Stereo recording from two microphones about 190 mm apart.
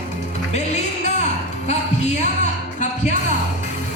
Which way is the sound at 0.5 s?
35° left (ahead or behind).